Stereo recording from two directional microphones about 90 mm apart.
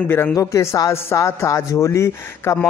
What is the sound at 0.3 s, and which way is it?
A man's voice, 35° left (ahead or behind).